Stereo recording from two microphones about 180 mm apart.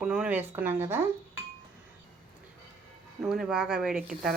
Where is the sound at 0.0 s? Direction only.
5° right (ahead or behind).